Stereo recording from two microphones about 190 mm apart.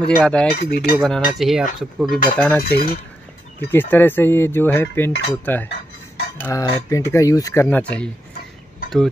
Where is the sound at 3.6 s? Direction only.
10° left (ahead or behind).